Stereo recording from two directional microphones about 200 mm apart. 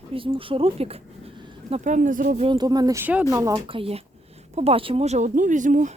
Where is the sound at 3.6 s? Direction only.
30° right (ahead or behind).